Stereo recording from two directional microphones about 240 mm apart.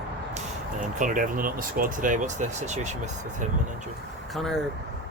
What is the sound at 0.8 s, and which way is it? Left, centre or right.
Speech, right.